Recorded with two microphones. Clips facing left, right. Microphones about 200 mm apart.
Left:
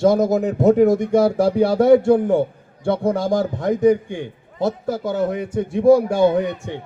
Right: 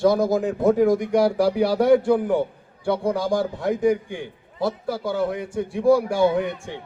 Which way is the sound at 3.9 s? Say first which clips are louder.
Left 5 dB; 25° left (ahead or behind).